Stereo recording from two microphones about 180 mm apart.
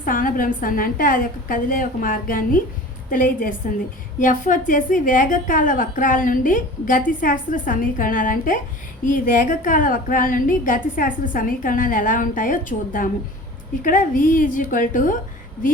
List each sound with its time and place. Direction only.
0.0 s a woman's voice: 50° left (ahead or behind)